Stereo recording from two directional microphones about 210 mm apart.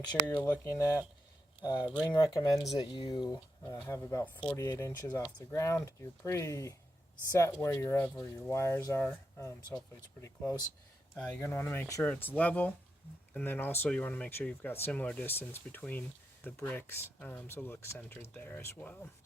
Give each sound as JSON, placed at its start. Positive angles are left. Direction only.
{"t": 0.2, "sound": "speech", "side_deg": 5}